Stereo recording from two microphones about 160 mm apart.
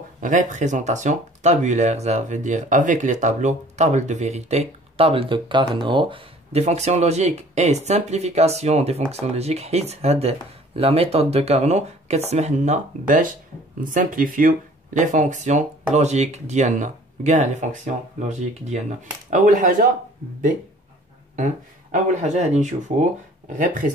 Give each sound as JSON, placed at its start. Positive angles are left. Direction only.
{"t": 0.2, "sound": "speech", "side_deg": -50}
{"t": 21.9, "sound": "speech", "side_deg": -45}